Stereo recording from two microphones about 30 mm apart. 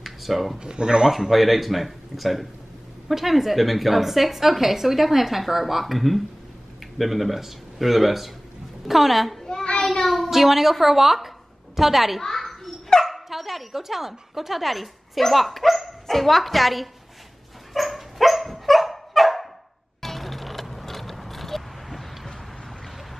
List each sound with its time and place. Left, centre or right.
0.0 s a sound: centre
0.6 s speech: right
1.3 s a woman's voice: centre
10.0 s a sound: centre
10.3 s a woman's voice: centre
12.2 s children playing: centre
13.0 s speech: centre
17.7 s dog: centre
20.0 s vehicle: centre